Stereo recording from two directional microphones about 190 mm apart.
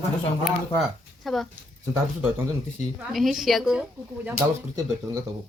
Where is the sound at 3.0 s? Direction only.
Centre (ahead or behind).